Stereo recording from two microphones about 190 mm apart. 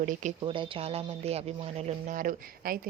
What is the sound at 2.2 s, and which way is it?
Speech, 50° right (ahead or behind).